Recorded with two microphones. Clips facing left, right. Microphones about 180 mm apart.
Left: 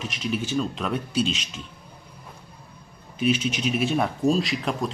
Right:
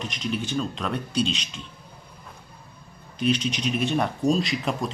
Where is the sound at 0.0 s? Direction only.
5° left (ahead or behind).